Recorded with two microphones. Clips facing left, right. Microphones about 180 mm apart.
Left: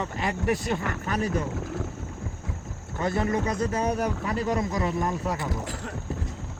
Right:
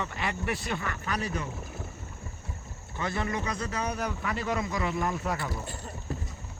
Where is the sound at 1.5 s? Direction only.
90° left.